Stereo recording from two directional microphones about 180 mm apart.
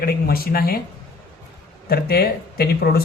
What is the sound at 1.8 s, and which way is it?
A man's voice, 60° left (ahead or behind).